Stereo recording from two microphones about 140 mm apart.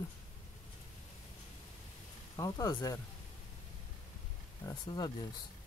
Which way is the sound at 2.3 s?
25° left (ahead or behind).